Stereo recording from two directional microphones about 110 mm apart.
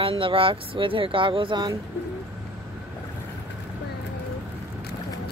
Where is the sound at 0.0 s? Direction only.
55° right (ahead or behind).